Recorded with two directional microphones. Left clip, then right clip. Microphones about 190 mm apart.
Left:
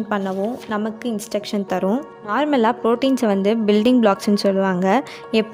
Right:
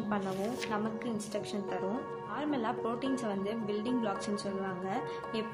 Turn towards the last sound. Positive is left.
turn(degrees=55)  # may be behind; listen again after turning